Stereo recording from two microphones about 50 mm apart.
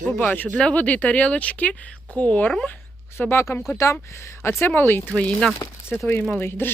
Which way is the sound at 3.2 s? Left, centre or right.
Left.